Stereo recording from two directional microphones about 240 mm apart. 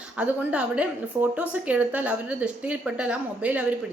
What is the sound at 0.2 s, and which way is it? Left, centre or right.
A woman's voice, centre.